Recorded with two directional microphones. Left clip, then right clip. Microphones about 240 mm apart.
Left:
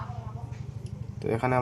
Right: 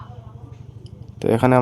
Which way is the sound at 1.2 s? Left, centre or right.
Right.